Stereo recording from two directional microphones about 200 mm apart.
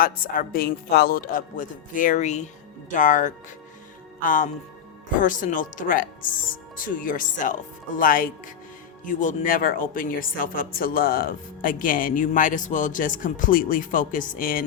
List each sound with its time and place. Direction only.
0.0 s speech: 45° left (ahead or behind)